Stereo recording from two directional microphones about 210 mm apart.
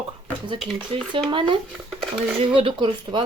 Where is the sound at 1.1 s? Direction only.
20° right (ahead or behind).